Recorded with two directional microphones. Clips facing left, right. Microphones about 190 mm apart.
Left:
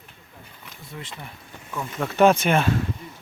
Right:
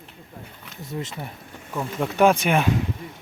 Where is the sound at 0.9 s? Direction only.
45° right (ahead or behind).